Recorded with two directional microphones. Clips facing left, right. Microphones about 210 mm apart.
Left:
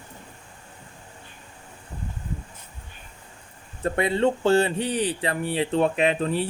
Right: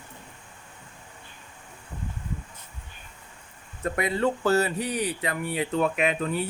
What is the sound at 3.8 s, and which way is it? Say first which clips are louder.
Speech: left 3 dB; 30° left (ahead or behind).